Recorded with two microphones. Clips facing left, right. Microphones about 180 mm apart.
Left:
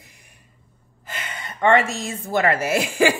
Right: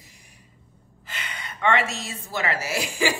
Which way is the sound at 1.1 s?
45° left (ahead or behind).